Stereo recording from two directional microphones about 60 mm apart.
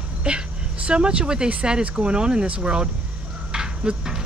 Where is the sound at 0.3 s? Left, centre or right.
Centre.